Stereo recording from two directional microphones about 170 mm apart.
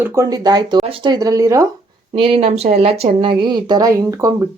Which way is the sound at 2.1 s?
30° right (ahead or behind).